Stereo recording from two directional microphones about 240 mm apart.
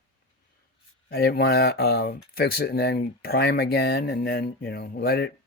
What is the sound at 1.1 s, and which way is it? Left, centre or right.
Speech, left.